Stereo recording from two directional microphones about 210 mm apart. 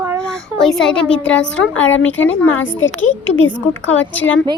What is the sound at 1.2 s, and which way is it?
Speech, 60° left (ahead or behind).